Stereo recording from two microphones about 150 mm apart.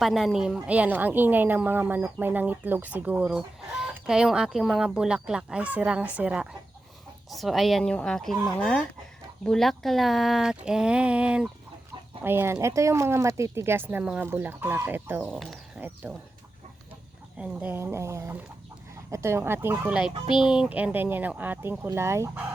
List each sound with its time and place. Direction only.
0.0 s a woman's voice: centre (ahead or behind)
9.4 s a woman's voice: centre (ahead or behind)
15.2 s a woman's voice: centre (ahead or behind)
17.3 s a woman's voice: 10° right (ahead or behind)